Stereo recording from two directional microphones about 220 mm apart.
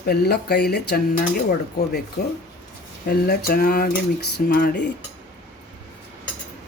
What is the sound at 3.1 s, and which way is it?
Speech, 50° left (ahead or behind).